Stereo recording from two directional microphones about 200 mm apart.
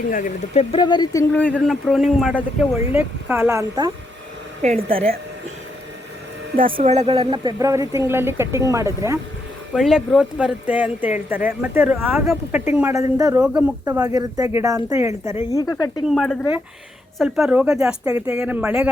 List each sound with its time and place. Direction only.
0.1 s speech: 40° left (ahead or behind)
0.7 s speech: 20° left (ahead or behind)
1.3 s speech: 5° left (ahead or behind); by 3.9 s 15° right (ahead or behind)
4.6 s a woman's voice: 30° right (ahead or behind)
6.7 s speech: 30° right (ahead or behind); by 9.1 s 15° right (ahead or behind)
9.7 s speech: centre (ahead or behind)
13.4 s speech: 5° right (ahead or behind)
13.8 s speech: 15° right (ahead or behind)
15.5 s speech: 20° left (ahead or behind)
16.0 s speech: centre (ahead or behind)